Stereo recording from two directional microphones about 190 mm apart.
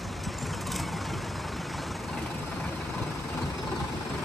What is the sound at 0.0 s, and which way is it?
Vehicle, centre (ahead or behind).